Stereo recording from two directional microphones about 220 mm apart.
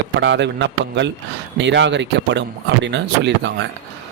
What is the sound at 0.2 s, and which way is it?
Speech, 55° right (ahead or behind).